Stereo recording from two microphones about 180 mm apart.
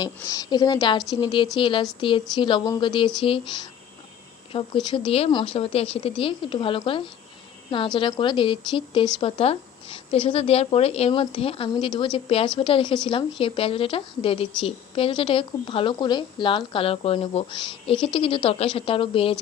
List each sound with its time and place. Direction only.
0.0 s a woman's voice: 20° left (ahead or behind)